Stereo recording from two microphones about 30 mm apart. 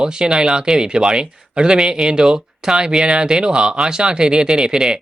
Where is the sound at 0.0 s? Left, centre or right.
Right.